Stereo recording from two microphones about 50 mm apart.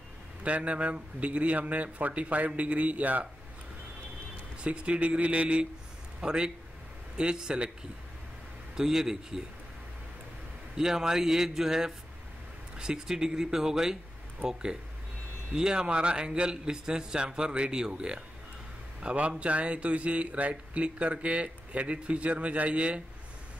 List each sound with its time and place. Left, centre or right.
0.4 s speech: right
4.6 s a man's voice: right
8.7 s a man's voice: centre
10.8 s a man's voice: centre